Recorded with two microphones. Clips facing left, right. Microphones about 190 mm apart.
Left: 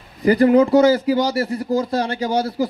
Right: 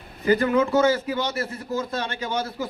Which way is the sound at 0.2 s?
35° left (ahead or behind).